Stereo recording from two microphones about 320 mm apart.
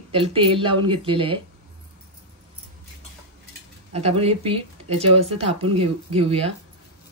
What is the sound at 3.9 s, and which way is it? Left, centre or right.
Speech, centre.